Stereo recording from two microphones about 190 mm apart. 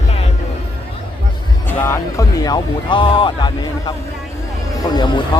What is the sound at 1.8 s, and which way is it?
Speech, 15° left (ahead or behind).